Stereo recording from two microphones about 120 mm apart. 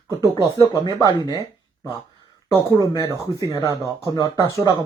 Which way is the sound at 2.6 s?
30° right (ahead or behind).